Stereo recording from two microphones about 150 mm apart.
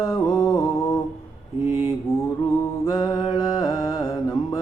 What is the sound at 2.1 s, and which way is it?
Mantra, 25° left (ahead or behind).